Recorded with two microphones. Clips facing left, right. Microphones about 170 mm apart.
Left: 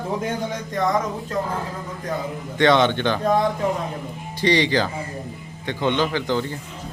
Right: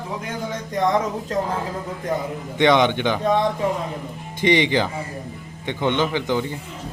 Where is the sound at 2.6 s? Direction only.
15° right (ahead or behind).